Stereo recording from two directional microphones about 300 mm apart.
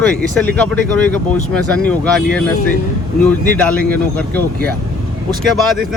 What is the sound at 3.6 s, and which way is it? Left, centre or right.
Speech, centre.